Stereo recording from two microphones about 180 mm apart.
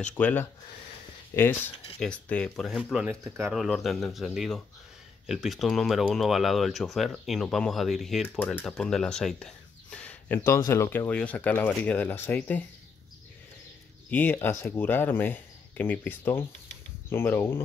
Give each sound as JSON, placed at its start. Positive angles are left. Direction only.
{"t": 0.2, "sound": "speech", "side_deg": 10}
{"t": 3.1, "sound": "speech", "side_deg": -15}
{"t": 3.5, "sound": "speech", "side_deg": 0}
{"t": 14.1, "sound": "speech", "side_deg": 10}